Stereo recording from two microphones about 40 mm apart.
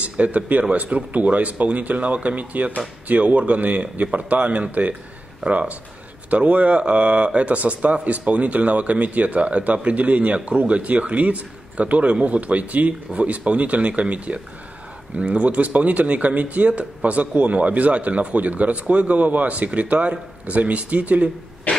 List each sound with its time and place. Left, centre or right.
0.0 s speech: right